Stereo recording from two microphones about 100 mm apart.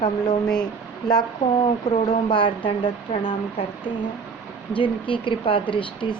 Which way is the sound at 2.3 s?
55° left (ahead or behind).